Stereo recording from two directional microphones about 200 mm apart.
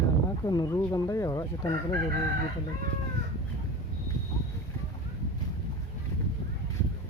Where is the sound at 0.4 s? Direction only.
20° left (ahead or behind).